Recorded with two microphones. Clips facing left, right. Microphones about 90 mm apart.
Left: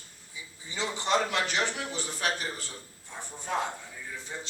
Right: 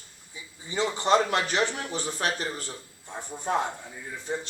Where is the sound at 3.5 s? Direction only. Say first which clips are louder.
Right 4 dB; 40° right (ahead or behind).